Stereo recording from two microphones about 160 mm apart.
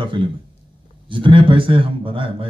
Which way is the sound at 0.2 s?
30° right (ahead or behind).